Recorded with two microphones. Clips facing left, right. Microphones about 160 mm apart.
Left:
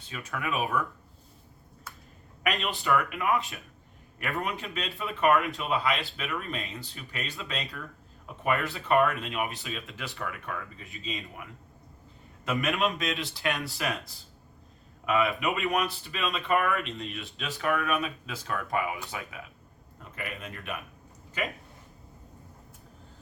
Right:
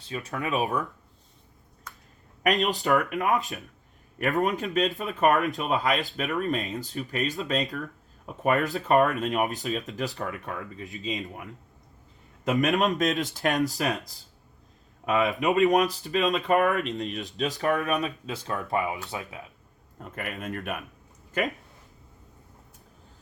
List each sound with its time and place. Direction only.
0.1 s speech: 35° right (ahead or behind)
1.9 s a sound: 5° left (ahead or behind)
2.4 s speech: 40° right (ahead or behind)
12.5 s speech: 40° right (ahead or behind)
20.1 s speech: 50° right (ahead or behind)